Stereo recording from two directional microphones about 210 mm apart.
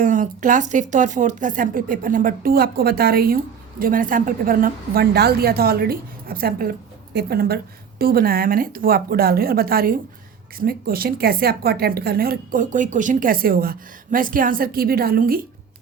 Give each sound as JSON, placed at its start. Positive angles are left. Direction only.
{"t": 0.0, "sound": "speech", "side_deg": -40}